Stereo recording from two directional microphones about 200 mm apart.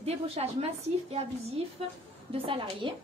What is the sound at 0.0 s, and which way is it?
Speech, 30° right (ahead or behind).